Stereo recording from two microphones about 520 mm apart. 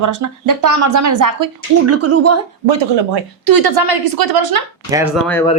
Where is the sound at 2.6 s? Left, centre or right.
Right.